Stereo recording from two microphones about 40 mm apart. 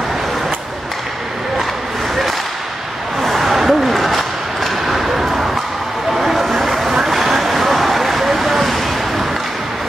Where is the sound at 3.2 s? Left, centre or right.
Centre.